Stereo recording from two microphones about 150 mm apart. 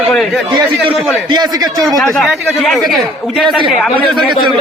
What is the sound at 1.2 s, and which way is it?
Speech, 30° right (ahead or behind).